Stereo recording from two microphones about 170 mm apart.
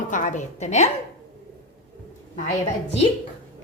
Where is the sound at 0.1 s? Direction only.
50° left (ahead or behind).